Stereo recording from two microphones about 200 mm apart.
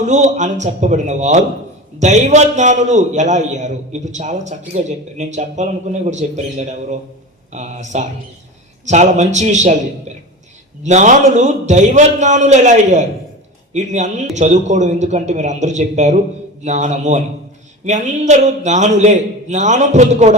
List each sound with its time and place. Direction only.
0.0 s a man's voice: 35° right (ahead or behind)
10.8 s a man's voice: 35° right (ahead or behind)